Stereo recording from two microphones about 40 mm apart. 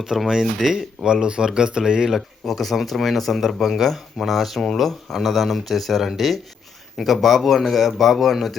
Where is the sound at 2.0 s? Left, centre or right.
Centre.